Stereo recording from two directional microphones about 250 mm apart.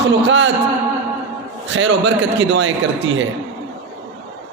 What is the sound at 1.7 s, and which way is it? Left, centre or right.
Speech, right.